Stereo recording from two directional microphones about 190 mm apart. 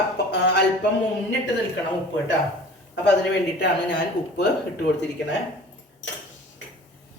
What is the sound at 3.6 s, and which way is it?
Speech, 65° left (ahead or behind).